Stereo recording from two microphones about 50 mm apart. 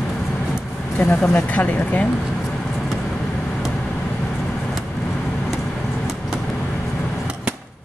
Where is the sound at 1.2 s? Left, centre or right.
Left.